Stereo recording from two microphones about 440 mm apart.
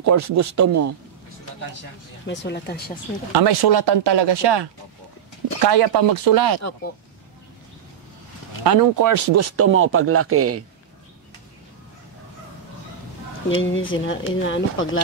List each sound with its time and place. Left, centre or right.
0.0 s speech: right
2.2 s speech: left
3.3 s speech: right
8.6 s speech: right
13.5 s speech: left